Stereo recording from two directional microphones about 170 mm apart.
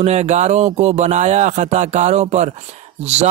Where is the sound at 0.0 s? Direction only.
40° right (ahead or behind).